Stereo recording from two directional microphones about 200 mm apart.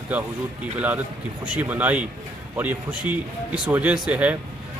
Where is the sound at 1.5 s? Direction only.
5° right (ahead or behind).